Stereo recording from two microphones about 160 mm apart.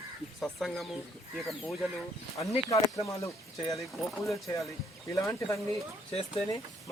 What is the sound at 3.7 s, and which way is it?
Speech, 20° left (ahead or behind).